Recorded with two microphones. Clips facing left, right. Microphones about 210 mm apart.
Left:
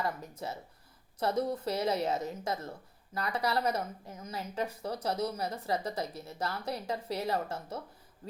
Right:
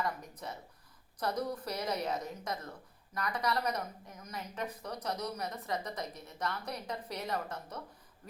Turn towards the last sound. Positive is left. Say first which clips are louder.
# left 4 dB
turn(degrees=30)  # may be behind; listen again after turning